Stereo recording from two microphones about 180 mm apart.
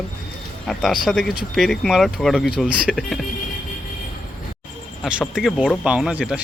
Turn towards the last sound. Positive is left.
turn(degrees=-5)  # may be behind; listen again after turning